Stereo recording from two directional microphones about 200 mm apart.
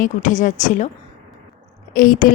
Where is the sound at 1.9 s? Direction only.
45° left (ahead or behind).